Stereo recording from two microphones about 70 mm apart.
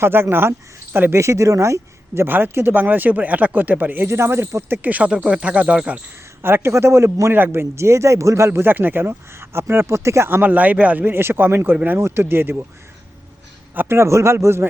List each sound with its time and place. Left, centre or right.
0.0 s a man's voice: right
1.1 s speech: right
2.2 s speech: right; by 6.0 s centre
6.4 s a man's voice: right
10.2 s a man's voice: right
13.7 s a man's voice: right